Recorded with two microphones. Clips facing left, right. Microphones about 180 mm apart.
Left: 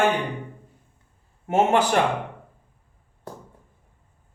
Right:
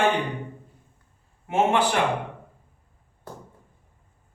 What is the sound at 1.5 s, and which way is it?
Speech, 45° left (ahead or behind).